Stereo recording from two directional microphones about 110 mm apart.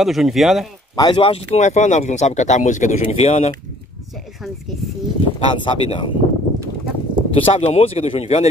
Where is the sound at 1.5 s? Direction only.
90° left.